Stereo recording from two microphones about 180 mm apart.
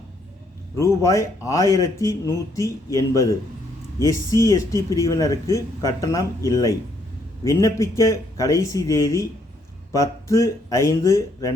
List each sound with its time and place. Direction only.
0.8 s speech: 15° left (ahead or behind)